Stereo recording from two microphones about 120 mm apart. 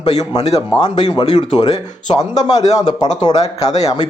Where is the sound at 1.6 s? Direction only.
30° left (ahead or behind).